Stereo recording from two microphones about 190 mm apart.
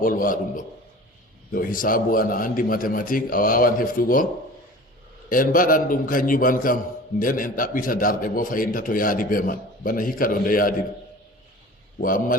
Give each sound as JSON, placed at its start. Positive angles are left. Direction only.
{"t": 0.0, "sound": "a man's voice", "side_deg": 45}
{"t": 5.3, "sound": "a man's voice", "side_deg": 45}
{"t": 11.9, "sound": "a man's voice", "side_deg": 45}